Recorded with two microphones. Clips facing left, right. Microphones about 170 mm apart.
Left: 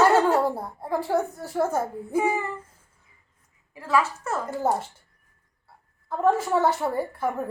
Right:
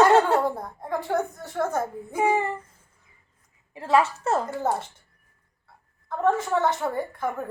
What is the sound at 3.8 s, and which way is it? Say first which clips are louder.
Speech: right 3 dB; 25° right (ahead or behind).